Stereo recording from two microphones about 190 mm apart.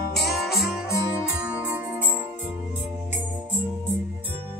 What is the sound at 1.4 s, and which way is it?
Music, 10° right (ahead or behind).